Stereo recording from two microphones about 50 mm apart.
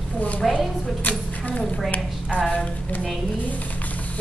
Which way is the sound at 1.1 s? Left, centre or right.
Left.